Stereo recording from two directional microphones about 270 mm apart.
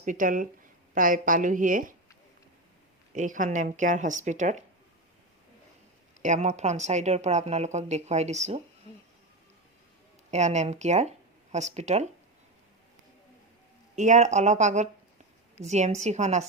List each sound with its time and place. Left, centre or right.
0.0 s speech: right
3.2 s speech: right
6.2 s speech: right
10.3 s speech: right
13.9 s speech: right